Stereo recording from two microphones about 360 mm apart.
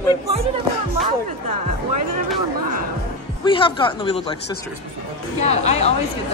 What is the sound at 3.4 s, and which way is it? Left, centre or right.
Speech, centre.